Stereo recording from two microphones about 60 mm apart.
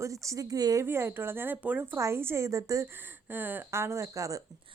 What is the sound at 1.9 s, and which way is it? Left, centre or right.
Speech, right.